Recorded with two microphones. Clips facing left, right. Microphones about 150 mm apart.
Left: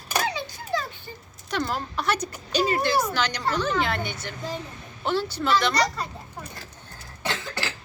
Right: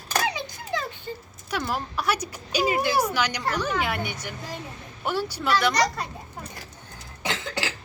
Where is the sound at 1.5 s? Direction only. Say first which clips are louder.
Left 1 dB; 10° right (ahead or behind).